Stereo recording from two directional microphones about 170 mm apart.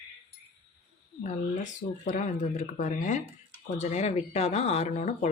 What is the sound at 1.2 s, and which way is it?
Speech, 45° left (ahead or behind).